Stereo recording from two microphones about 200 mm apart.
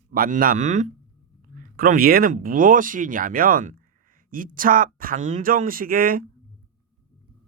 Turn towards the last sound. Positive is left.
turn(degrees=-45)  # may be behind; listen again after turning